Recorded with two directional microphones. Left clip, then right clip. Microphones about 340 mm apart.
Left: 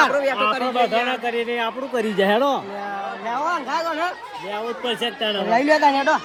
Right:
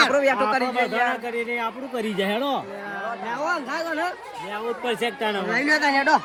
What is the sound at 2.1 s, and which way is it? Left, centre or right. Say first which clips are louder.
Speech: left 7 dB; left.